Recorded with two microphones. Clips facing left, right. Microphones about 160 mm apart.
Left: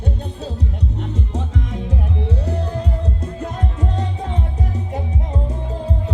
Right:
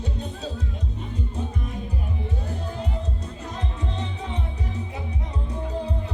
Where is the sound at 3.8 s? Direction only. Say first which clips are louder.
Left 6 dB; 45° left (ahead or behind).